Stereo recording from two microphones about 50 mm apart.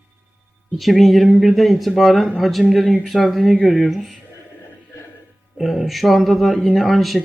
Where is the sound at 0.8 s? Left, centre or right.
Centre.